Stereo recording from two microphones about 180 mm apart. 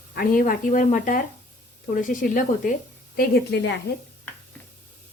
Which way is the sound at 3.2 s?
65° left (ahead or behind).